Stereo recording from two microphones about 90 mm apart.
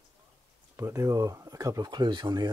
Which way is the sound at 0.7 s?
30° right (ahead or behind).